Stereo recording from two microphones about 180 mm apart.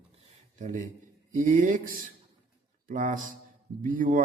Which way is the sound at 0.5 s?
45° right (ahead or behind).